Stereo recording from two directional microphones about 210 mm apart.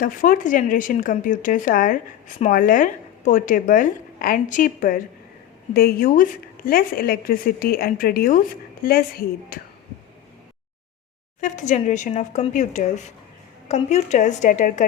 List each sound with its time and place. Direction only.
0.0 s a woman's voice: 40° left (ahead or behind)
11.3 s speech: 35° left (ahead or behind)